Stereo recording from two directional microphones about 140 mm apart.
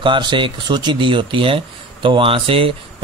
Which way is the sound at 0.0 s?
35° right (ahead or behind).